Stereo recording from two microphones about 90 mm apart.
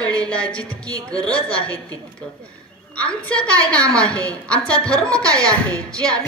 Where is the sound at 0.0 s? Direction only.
45° right (ahead or behind).